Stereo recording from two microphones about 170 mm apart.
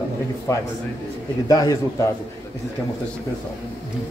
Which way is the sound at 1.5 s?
20° left (ahead or behind).